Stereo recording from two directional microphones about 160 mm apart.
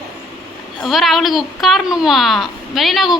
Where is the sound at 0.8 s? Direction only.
Centre (ahead or behind).